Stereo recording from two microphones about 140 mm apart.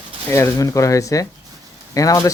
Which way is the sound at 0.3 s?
20° left (ahead or behind).